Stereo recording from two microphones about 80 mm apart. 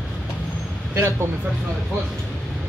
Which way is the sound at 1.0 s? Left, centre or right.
Right.